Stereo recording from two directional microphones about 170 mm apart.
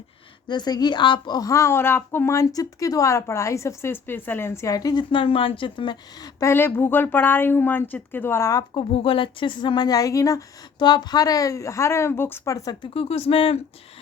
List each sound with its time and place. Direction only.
0.4 s speech: 25° left (ahead or behind)
8.9 s speech: 30° left (ahead or behind)
12.9 s speech: 35° left (ahead or behind)